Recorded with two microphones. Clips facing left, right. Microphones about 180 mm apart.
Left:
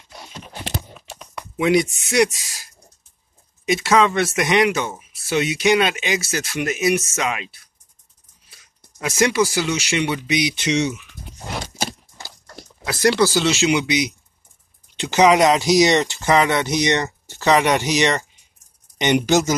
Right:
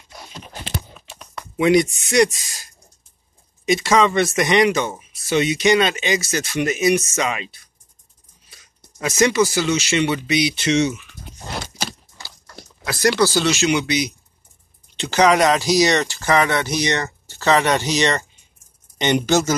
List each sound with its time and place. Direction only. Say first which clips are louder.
1.3 s speech: right 2 dB; 5° left (ahead or behind)
11.3 s a sound: even; 5° left (ahead or behind)
12.8 s speech: left 1 dB; 25° left (ahead or behind)